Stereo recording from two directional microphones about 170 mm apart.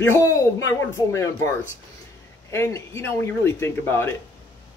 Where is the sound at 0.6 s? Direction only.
15° left (ahead or behind).